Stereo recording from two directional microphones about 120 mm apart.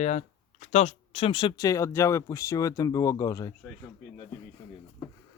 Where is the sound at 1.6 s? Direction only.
25° left (ahead or behind).